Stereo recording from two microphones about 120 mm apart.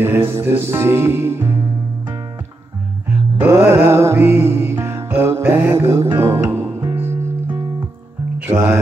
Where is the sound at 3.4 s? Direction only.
20° right (ahead or behind).